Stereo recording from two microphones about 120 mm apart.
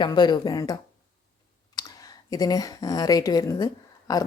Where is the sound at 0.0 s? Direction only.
35° left (ahead or behind).